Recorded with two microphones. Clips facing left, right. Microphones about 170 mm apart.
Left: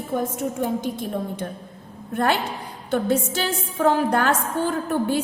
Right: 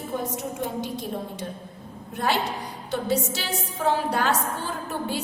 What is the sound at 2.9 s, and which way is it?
A woman's voice, 55° left (ahead or behind).